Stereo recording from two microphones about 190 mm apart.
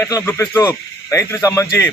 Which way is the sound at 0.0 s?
15° left (ahead or behind).